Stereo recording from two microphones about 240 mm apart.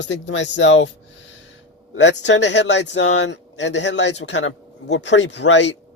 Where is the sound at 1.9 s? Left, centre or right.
Left.